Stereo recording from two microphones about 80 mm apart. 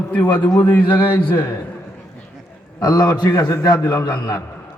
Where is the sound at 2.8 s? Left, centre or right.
Left.